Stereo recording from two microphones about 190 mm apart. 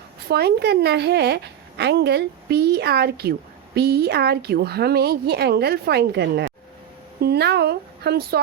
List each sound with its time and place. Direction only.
0.3 s a woman's voice: 60° right (ahead or behind)